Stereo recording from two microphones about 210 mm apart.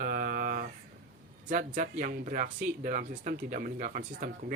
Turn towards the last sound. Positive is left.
turn(degrees=-40)  # may be behind; listen again after turning